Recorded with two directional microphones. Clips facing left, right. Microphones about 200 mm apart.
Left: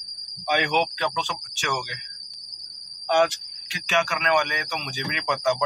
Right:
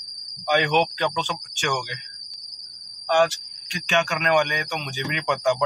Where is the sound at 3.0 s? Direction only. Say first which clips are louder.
Right 1 dB; 20° left (ahead or behind).